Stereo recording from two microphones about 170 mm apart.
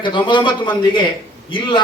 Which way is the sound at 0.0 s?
30° left (ahead or behind).